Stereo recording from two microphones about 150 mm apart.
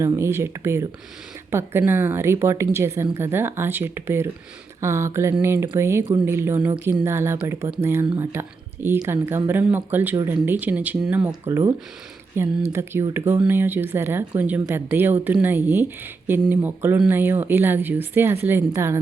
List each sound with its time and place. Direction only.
0.0 s speech: 20° right (ahead or behind)